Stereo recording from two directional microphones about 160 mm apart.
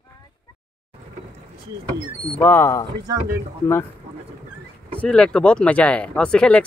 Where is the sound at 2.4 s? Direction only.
15° left (ahead or behind).